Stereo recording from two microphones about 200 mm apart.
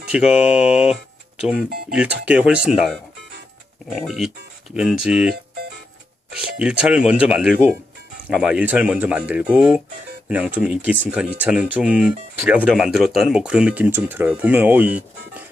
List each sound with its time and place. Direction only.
0.1 s speech: 5° right (ahead or behind)
5.3 s speech: 50° right (ahead or behind)
6.3 s speech: 5° right (ahead or behind)